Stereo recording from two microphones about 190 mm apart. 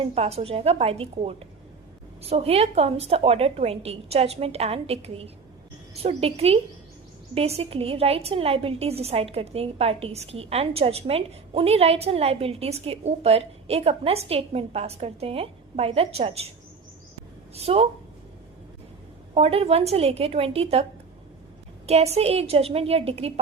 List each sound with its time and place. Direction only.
0.1 s a woman's voice: 35° right (ahead or behind)
17.5 s speech: 30° right (ahead or behind)
19.3 s a woman's voice: 30° right (ahead or behind)
21.8 s a woman's voice: 35° right (ahead or behind)